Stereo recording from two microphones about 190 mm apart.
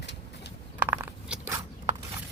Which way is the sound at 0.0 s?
65° left (ahead or behind).